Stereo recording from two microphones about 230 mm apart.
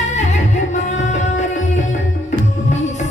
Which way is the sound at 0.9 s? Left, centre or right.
Left.